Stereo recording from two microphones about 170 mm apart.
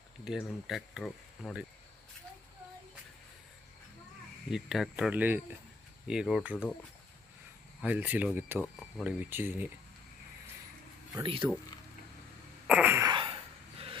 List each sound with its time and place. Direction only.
0.3 s speech: 5° right (ahead or behind)
4.5 s speech: centre (ahead or behind)
7.8 s speech: 10° right (ahead or behind)
9.3 s speech: 10° right (ahead or behind)
11.2 s speech: 30° right (ahead or behind)
12.6 s a sound: 10° right (ahead or behind)
13.1 s dog: 30° right (ahead or behind)